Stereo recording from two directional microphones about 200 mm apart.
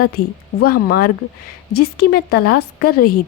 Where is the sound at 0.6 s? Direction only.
50° left (ahead or behind).